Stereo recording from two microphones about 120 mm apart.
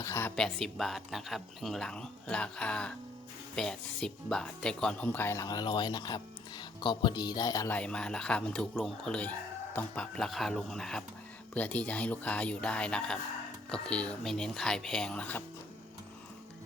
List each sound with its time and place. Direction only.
0.0 s a sound: 25° left (ahead or behind)
0.3 s speech: 5° left (ahead or behind); by 7.7 s 30° left (ahead or behind)
7.7 s speech: 10° left (ahead or behind)